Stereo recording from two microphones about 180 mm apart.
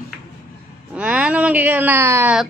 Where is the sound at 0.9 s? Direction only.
5° right (ahead or behind).